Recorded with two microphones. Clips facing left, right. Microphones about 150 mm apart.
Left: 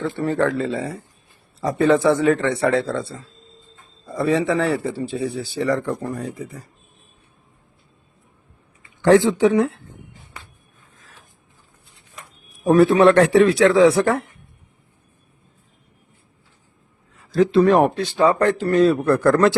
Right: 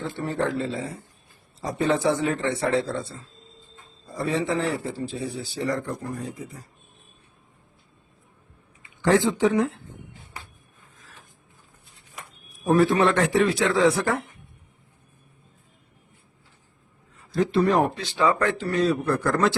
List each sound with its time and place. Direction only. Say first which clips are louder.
0.0 s a man's voice: left 6 dB; 70° left (ahead or behind)
4.0 s a man's voice: left 6 dB; 75° left (ahead or behind)
9.0 s a man's voice: left 6 dB; 75° left (ahead or behind)
12.6 s a man's voice: left 6 dB; 70° left (ahead or behind)
17.3 s speech: left 6 dB; 90° left; by 18.1 s 70° left (ahead or behind)
18.2 s speech: left 5 dB; 35° left (ahead or behind)
18.6 s a man's voice: left 7 dB; 50° left (ahead or behind)